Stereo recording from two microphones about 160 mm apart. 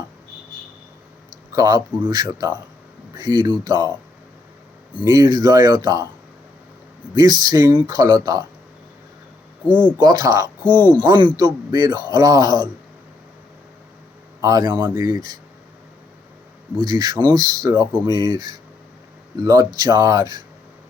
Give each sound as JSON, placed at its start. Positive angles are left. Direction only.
{"t": 1.5, "sound": "a man's voice", "side_deg": -25}
{"t": 5.0, "sound": "a man's voice", "side_deg": -25}
{"t": 7.1, "sound": "a man's voice", "side_deg": -25}
{"t": 10.0, "sound": "a man's voice", "side_deg": -25}
{"t": 14.4, "sound": "a man's voice", "side_deg": -25}
{"t": 16.8, "sound": "a man's voice", "side_deg": -25}